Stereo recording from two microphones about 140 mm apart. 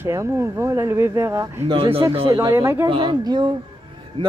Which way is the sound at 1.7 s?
40° right (ahead or behind).